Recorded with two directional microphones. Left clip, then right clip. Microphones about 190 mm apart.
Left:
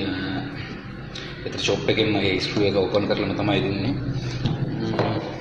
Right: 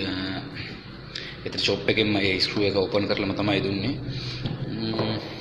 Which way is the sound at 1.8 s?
30° right (ahead or behind).